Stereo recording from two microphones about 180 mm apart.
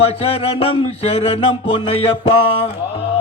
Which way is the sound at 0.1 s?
35° left (ahead or behind).